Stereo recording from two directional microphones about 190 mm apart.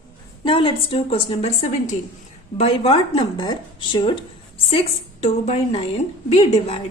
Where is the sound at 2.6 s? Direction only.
30° left (ahead or behind).